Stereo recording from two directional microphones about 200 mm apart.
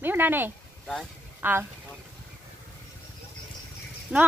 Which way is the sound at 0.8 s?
Centre (ahead or behind).